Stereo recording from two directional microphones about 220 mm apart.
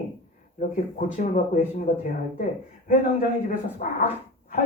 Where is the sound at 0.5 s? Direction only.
35° left (ahead or behind).